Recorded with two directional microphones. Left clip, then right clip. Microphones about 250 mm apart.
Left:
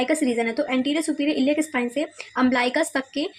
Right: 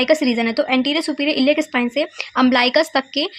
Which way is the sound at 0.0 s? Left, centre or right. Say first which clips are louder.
Right 6 dB; centre.